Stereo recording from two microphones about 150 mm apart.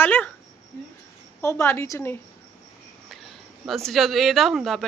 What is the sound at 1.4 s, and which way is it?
Speech, 20° left (ahead or behind).